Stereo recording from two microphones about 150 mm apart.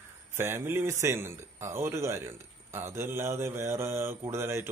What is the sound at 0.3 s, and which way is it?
A man's voice, 15° right (ahead or behind).